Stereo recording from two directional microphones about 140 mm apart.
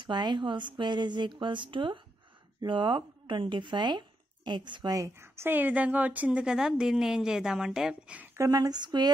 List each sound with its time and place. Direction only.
0.0 s a woman's voice: 30° right (ahead or behind); by 8.3 s 5° right (ahead or behind)
8.4 s speech: 25° right (ahead or behind)